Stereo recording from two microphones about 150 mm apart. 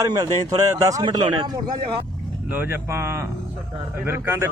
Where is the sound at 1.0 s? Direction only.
30° right (ahead or behind).